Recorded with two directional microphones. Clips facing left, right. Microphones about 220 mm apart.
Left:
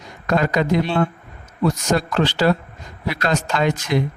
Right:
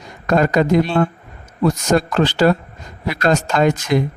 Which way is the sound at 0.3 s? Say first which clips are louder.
Right 4 dB; 45° right (ahead or behind).